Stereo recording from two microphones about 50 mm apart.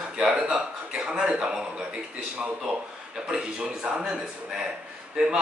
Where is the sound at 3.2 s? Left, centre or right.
Centre.